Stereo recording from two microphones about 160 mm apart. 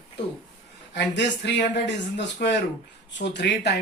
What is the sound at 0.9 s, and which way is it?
Speech, 90° left.